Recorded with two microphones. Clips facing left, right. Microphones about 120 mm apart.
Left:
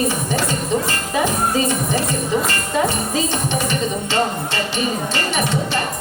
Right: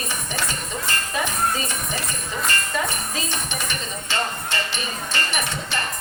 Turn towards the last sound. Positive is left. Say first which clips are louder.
# left 6 dB
turn(degrees=15)  # may be behind; listen again after turning